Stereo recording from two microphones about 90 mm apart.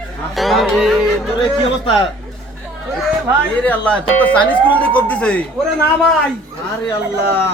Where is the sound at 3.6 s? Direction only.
20° left (ahead or behind).